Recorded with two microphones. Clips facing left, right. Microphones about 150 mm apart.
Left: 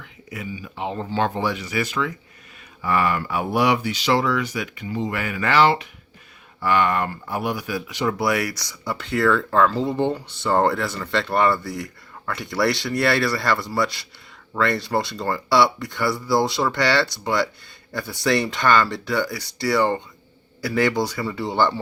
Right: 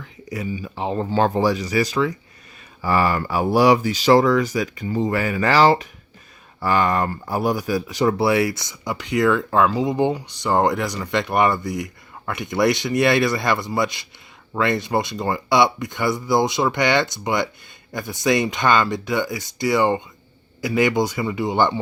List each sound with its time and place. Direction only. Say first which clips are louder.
0.3 s speech: right 5 dB; 35° right (ahead or behind)
8.2 s speech: right 4 dB; 25° right (ahead or behind)